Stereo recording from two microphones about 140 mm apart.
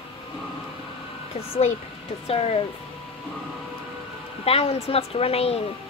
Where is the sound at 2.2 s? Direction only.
45° left (ahead or behind).